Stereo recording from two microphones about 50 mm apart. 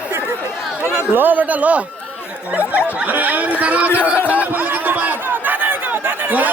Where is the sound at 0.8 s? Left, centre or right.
Right.